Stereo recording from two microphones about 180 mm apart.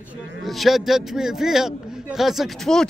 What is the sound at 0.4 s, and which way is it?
Speech, centre (ahead or behind).